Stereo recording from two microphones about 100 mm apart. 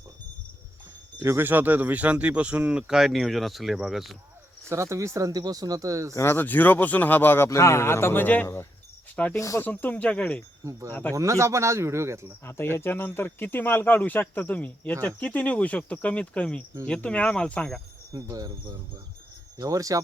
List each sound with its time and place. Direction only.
1.2 s speech: 25° right (ahead or behind); by 4.2 s centre (ahead or behind)
4.7 s speech: 30° right (ahead or behind)
6.1 s speech: 25° left (ahead or behind)
9.3 s speech: 30° left (ahead or behind)
9.6 s speech: 20° left (ahead or behind)
10.6 s speech: 30° right (ahead or behind)
12.7 s speech: 20° left (ahead or behind)
18.1 s speech: 40° right (ahead or behind)